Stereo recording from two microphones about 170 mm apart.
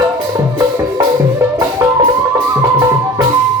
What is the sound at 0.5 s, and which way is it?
Music, 20° right (ahead or behind).